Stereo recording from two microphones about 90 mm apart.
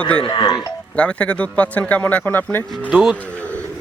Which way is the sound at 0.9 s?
15° left (ahead or behind).